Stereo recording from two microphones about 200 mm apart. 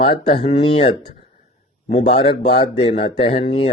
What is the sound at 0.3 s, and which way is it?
A man's voice, 30° left (ahead or behind).